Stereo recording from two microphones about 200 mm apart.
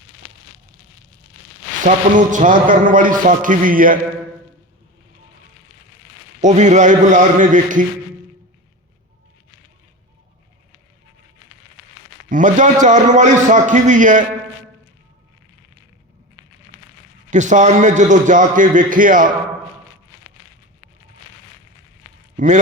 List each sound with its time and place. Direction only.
1.8 s a man's voice: 40° right (ahead or behind)
6.4 s a man's voice: 35° right (ahead or behind)
12.3 s a man's voice: 40° right (ahead or behind)
17.3 s a man's voice: 35° right (ahead or behind)
22.4 s a man's voice: 40° right (ahead or behind)